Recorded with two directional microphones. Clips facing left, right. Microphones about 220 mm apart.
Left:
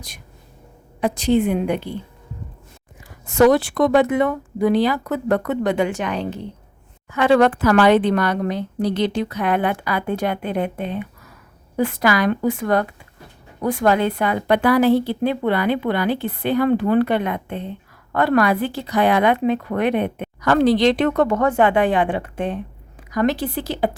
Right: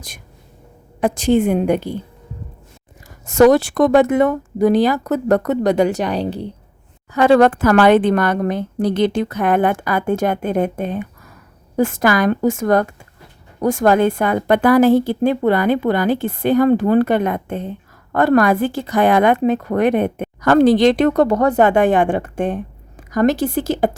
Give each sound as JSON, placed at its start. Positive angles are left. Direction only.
{"t": 1.0, "sound": "a woman's voice", "side_deg": -50}
{"t": 3.2, "sound": "a woman's voice", "side_deg": -45}